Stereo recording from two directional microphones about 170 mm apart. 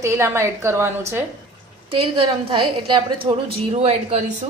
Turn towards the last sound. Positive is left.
turn(degrees=-40)  # may be behind; listen again after turning